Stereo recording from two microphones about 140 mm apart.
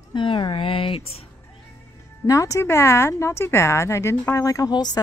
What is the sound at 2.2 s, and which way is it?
Speech, 20° left (ahead or behind).